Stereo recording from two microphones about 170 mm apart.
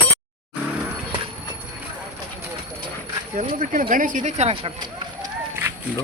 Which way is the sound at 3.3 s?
50° right (ahead or behind).